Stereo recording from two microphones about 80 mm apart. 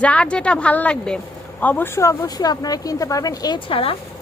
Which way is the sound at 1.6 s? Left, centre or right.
Left.